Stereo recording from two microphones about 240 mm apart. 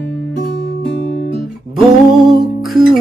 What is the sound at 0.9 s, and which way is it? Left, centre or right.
Guitar, left.